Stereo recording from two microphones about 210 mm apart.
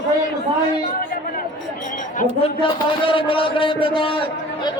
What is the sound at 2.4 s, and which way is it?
A man's voice, 25° left (ahead or behind).